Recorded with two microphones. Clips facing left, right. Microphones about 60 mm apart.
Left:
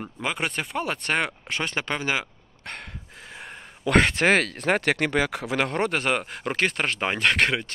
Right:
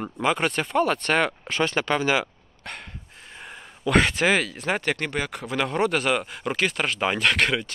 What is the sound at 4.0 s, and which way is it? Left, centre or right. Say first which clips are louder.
Speech: left 2 dB; left.